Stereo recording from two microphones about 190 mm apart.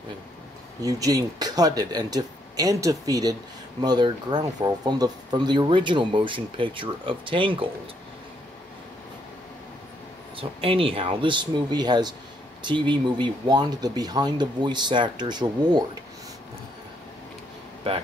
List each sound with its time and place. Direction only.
0.8 s speech: 20° right (ahead or behind)
10.3 s speech: 30° right (ahead or behind)